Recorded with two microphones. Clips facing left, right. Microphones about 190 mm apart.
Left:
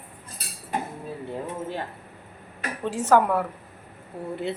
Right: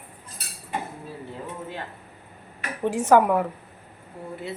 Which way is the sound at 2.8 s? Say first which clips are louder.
Right 2 dB; 15° right (ahead or behind).